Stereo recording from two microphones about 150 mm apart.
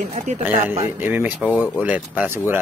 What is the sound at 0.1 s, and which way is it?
Speech, 50° right (ahead or behind).